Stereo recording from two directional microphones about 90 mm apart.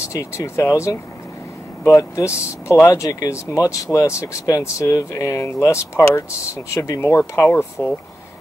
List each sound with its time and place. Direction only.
0.1 s speech: 35° left (ahead or behind)